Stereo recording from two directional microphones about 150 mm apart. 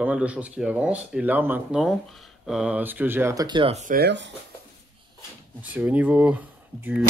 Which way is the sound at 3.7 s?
55° right (ahead or behind).